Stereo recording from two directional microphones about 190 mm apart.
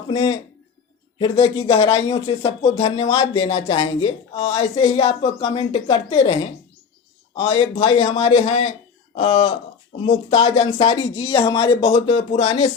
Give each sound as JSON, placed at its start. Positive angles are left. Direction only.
{"t": 0.1, "sound": "speech", "side_deg": 25}